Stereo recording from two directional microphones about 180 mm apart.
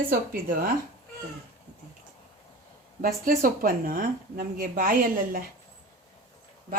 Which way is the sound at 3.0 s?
55° right (ahead or behind).